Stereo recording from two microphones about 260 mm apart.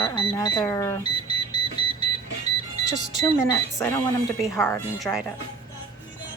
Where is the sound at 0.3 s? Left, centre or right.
Centre.